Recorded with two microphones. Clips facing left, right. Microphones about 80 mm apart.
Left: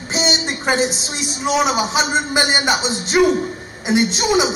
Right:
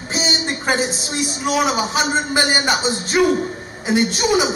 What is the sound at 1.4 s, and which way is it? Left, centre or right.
A man's voice, centre.